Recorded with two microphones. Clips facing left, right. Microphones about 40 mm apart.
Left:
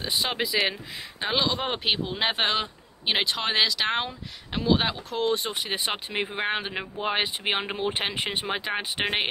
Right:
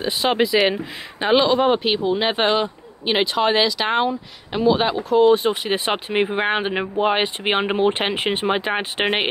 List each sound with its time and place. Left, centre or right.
0.0 s speech: centre
6.7 s speech: right
7.1 s speech: centre